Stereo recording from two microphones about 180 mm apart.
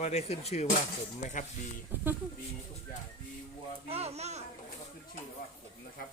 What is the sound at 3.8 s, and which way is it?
Speech, 35° right (ahead or behind).